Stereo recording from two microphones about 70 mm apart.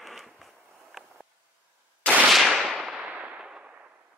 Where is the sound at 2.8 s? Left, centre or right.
Centre.